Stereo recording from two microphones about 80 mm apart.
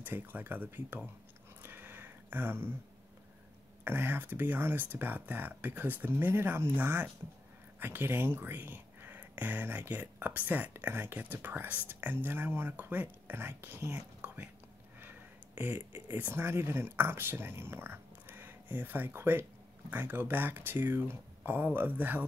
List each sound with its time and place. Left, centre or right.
0.0 s speech: right
1.6 s a sound: right
3.8 s speech: right